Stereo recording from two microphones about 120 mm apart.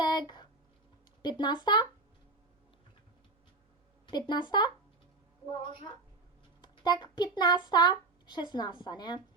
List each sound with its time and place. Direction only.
0.0 s a sound: 35° left (ahead or behind)
1.2 s speech: 35° left (ahead or behind)
4.0 s a woman's voice: 40° left (ahead or behind)